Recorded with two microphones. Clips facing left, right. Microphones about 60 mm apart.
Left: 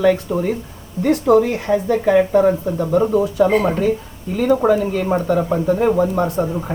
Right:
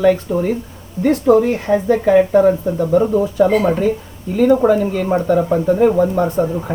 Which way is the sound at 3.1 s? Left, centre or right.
Centre.